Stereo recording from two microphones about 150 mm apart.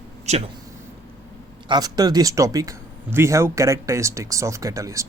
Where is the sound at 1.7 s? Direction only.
25° right (ahead or behind).